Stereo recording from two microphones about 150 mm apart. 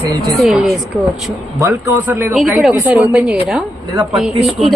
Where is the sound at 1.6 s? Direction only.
15° right (ahead or behind).